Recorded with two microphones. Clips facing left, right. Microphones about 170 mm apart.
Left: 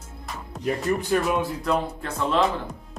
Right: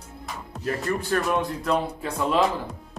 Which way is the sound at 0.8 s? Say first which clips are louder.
Left 2 dB; 15° left (ahead or behind).